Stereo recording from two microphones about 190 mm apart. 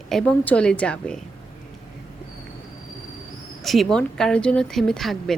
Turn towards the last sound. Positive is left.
turn(degrees=0)  # may be behind; listen again after turning